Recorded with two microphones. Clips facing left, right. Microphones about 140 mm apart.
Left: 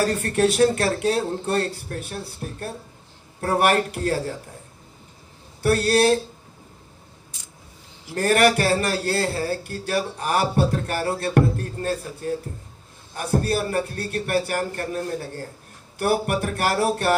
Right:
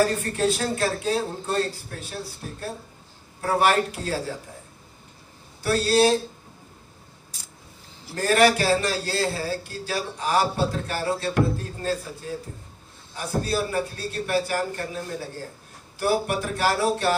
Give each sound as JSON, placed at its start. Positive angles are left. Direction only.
{"t": 0.0, "sound": "speech", "side_deg": 65}
{"t": 3.3, "sound": "speech", "side_deg": 60}
{"t": 5.6, "sound": "speech", "side_deg": 60}
{"t": 8.2, "sound": "speech", "side_deg": 60}
{"t": 16.0, "sound": "speech", "side_deg": 60}